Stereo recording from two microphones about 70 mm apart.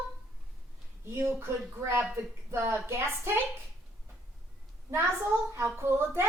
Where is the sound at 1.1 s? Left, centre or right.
Right.